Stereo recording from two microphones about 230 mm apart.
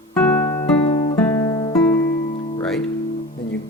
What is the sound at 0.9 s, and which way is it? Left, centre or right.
Guitar, left.